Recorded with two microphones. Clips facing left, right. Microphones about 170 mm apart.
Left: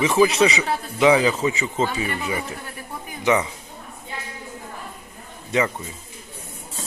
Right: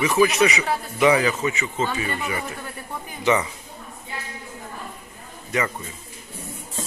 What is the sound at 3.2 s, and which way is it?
Speech, 15° left (ahead or behind).